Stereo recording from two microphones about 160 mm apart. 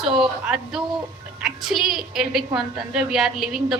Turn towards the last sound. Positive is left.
turn(degrees=-5)  # may be behind; listen again after turning